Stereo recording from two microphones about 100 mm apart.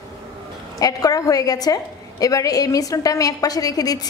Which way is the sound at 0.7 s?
40° left (ahead or behind).